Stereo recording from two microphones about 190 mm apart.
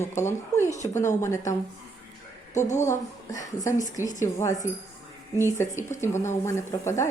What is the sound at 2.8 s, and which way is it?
Speech, 15° left (ahead or behind).